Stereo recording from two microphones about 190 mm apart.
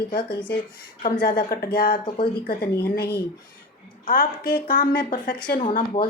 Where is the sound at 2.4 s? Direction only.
55° left (ahead or behind).